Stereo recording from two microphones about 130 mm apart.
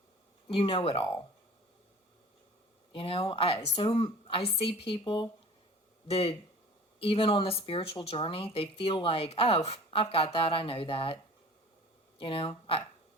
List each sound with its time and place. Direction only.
0.4 s a woman's voice: 45° left (ahead or behind)
2.9 s a woman's voice: 45° left (ahead or behind)
12.2 s a woman's voice: 40° left (ahead or behind)